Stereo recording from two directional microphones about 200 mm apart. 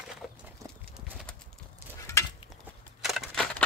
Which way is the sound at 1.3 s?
5° left (ahead or behind).